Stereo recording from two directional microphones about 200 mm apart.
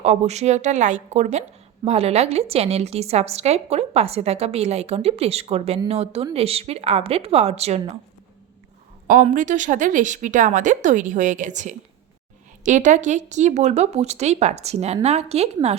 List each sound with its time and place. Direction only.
0.0 s a woman's voice: 35° right (ahead or behind)
9.0 s a woman's voice: 40° right (ahead or behind)